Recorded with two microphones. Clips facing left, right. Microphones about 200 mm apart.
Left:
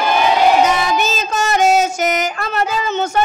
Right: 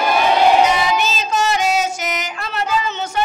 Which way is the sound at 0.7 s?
45° left (ahead or behind).